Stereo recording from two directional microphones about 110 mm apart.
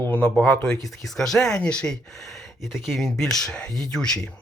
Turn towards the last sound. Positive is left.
turn(degrees=5)  # may be behind; listen again after turning